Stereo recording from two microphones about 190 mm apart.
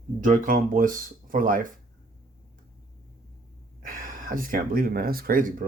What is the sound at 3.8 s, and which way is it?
Speech, 45° right (ahead or behind).